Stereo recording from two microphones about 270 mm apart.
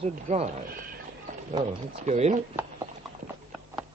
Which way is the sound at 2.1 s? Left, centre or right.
Right.